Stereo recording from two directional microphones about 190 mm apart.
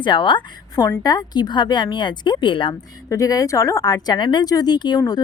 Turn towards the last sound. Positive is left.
turn(degrees=20)  # may be behind; listen again after turning